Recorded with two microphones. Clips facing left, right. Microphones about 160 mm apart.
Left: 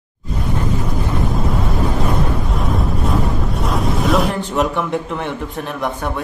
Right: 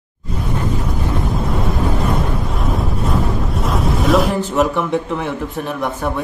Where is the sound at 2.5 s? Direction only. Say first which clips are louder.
Left 1 dB; centre (ahead or behind).